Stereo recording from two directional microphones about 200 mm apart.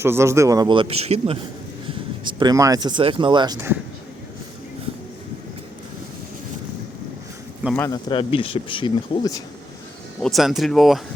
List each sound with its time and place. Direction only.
0.0 s speech: 15° right (ahead or behind); by 1.4 s 30° right (ahead or behind)
2.2 s speech: 20° right (ahead or behind)
7.8 s speech: 20° left (ahead or behind)
10.2 s speech: centre (ahead or behind)